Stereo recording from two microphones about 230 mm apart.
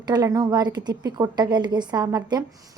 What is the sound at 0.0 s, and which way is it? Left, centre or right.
A woman's voice, centre.